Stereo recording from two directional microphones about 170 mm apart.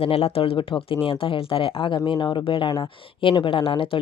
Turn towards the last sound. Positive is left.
turn(degrees=30)  # may be behind; listen again after turning